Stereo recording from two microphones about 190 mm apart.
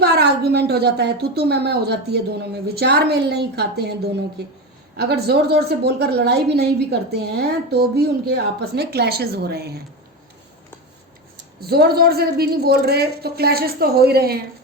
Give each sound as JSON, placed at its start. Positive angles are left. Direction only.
{"t": 0.0, "sound": "a woman's voice", "side_deg": -60}
{"t": 11.6, "sound": "a woman's voice", "side_deg": -55}